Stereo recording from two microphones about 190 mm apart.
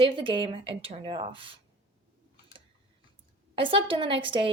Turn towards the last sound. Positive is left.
turn(degrees=-25)  # may be behind; listen again after turning